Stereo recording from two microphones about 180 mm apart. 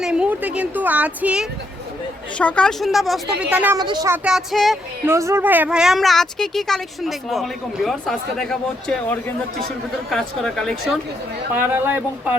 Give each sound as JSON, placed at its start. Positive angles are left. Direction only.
{"t": 0.0, "sound": "a woman's voice", "side_deg": -5}
{"t": 2.4, "sound": "a woman's voice", "side_deg": 5}
{"t": 3.8, "sound": "speech", "side_deg": -25}
{"t": 4.1, "sound": "a woman's voice", "side_deg": -5}
{"t": 5.0, "sound": "a woman's voice", "side_deg": -15}
{"t": 11.5, "sound": "a woman's voice", "side_deg": -10}